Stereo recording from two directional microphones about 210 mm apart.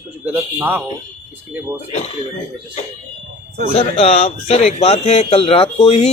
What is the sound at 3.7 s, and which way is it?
Speech, 25° left (ahead or behind).